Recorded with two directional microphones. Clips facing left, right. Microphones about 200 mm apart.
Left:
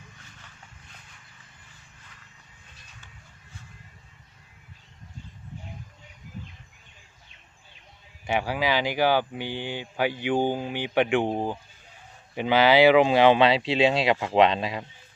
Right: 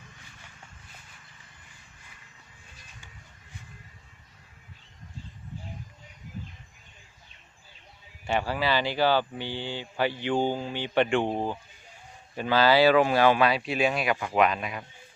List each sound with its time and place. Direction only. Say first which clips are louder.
8.3 s speech: left 1 dB; 15° left (ahead or behind)